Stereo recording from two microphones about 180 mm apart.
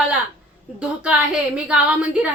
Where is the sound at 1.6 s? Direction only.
5° right (ahead or behind).